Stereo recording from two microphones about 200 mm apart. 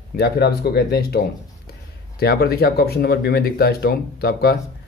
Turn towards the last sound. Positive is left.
turn(degrees=50)  # may be behind; listen again after turning